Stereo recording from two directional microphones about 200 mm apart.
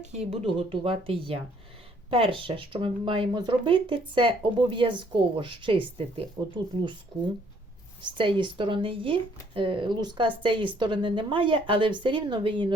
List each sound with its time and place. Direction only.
0.0 s speech: 35° right (ahead or behind)
8.2 s speech: 25° right (ahead or behind)